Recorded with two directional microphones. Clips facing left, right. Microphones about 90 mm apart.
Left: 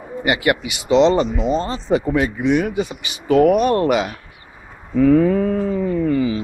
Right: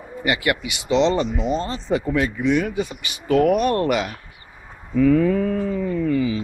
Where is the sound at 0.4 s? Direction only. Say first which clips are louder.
Left 4 dB; 45° left (ahead or behind).